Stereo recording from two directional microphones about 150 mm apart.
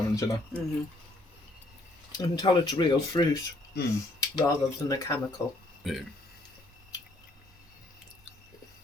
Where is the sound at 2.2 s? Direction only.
25° left (ahead or behind).